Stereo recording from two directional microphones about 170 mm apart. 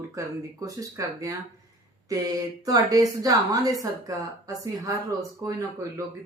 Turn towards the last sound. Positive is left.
turn(degrees=-20)  # may be behind; listen again after turning